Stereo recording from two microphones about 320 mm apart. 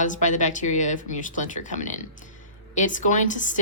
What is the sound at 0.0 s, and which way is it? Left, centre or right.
A woman's voice, left.